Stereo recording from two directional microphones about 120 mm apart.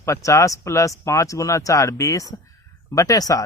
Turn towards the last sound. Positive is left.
turn(degrees=30)  # may be behind; listen again after turning